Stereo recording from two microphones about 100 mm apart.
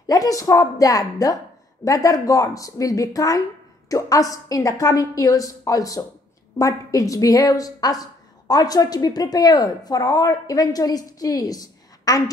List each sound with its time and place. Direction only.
0.0 s a woman's voice: 35° left (ahead or behind)